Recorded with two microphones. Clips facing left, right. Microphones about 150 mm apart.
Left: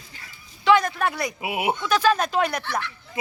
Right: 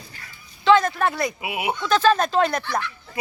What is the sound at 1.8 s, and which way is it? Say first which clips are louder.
Speech: right 4 dB; 10° left (ahead or behind).